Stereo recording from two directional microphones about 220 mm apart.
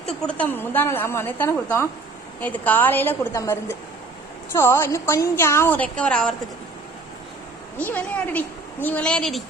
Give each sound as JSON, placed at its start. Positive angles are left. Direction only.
{"t": 0.2, "sound": "a woman's voice", "side_deg": 5}
{"t": 7.8, "sound": "a woman's voice", "side_deg": 5}